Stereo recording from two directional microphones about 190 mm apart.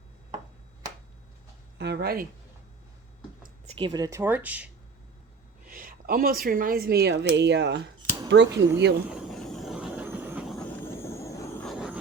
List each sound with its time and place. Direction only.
1.8 s speech: 60° right (ahead or behind)
3.8 s speech: 25° right (ahead or behind); by 4.7 s 10° right (ahead or behind)
5.6 s speech: 45° right (ahead or behind); by 9.0 s 65° right (ahead or behind)
9.0 s vehicle: centre (ahead or behind)
10.7 s vehicle: 10° left (ahead or behind)
11.6 s vehicle: centre (ahead or behind)